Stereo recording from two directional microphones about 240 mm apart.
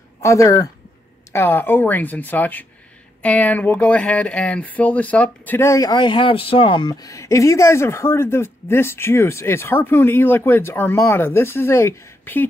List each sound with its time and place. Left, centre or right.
0.2 s speech: centre